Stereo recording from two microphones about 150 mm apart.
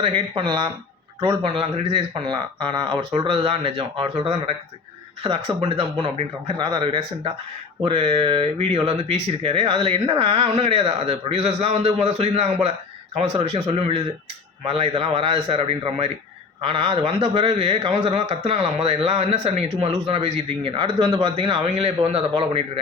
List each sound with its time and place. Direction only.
0.0 s a man's voice: 35° right (ahead or behind)